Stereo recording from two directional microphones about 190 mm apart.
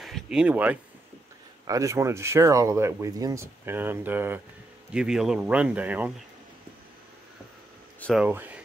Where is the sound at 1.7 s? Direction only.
15° right (ahead or behind).